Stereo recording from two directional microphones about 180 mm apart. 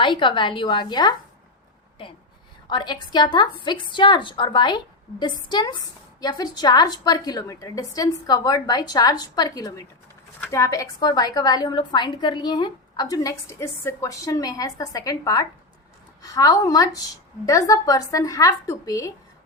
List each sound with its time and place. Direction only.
0.0 s a woman's voice: 25° left (ahead or behind)
2.6 s a woman's voice: 25° left (ahead or behind)